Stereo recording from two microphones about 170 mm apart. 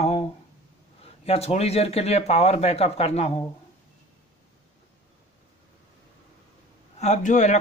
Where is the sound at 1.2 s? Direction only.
35° left (ahead or behind).